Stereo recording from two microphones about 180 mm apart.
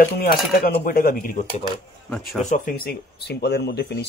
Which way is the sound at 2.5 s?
50° left (ahead or behind).